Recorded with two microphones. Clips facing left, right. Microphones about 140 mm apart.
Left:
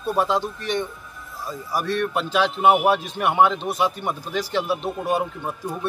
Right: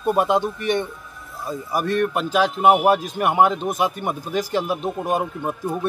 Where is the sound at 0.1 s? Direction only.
15° right (ahead or behind).